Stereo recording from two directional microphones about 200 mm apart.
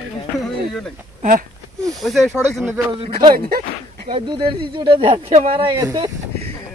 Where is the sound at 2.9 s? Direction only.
30° right (ahead or behind).